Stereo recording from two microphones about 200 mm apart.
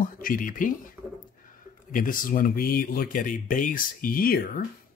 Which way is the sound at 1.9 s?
45° left (ahead or behind).